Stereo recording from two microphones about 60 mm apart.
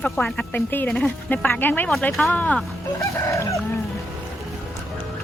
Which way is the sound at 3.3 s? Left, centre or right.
Left.